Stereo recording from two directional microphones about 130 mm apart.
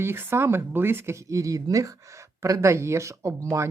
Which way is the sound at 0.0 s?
20° right (ahead or behind).